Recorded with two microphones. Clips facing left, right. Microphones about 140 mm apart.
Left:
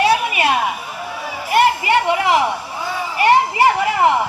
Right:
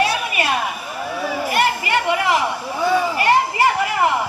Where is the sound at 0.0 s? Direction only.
20° left (ahead or behind).